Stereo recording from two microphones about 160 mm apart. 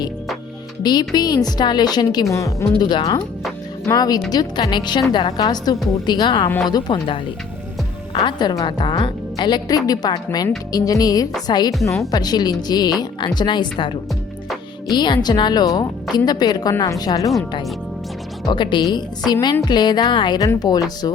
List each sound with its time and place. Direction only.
0.8 s a woman's voice: 25° left (ahead or behind)
18.4 s a woman's voice: 30° left (ahead or behind)